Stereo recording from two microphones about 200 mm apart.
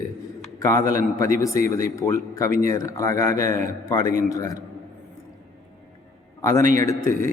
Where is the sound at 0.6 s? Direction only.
15° left (ahead or behind).